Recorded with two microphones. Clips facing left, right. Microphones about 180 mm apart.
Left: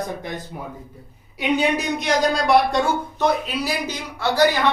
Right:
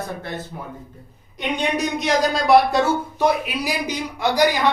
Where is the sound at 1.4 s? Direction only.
5° left (ahead or behind); by 4.7 s 15° right (ahead or behind).